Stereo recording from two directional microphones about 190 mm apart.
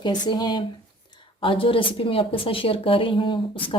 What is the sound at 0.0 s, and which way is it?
Speech, 20° left (ahead or behind).